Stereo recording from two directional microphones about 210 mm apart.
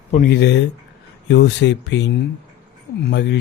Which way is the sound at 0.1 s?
40° left (ahead or behind).